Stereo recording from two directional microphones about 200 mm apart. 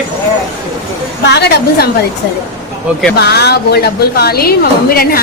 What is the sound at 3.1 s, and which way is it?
A woman's voice, 55° left (ahead or behind).